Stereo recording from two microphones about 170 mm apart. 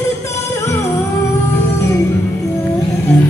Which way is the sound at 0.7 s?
15° left (ahead or behind).